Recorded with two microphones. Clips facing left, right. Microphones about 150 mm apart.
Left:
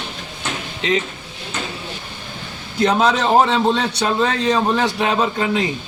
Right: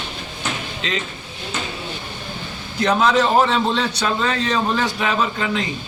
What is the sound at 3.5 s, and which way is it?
A man's voice, 20° left (ahead or behind).